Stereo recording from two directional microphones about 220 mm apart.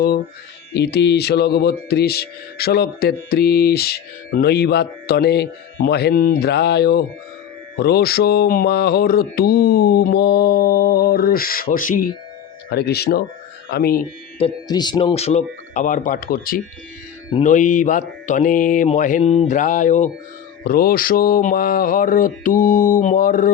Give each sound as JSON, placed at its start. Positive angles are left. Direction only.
{"t": 0.7, "sound": "speech", "side_deg": 50}
{"t": 14.3, "sound": "mantra", "side_deg": 20}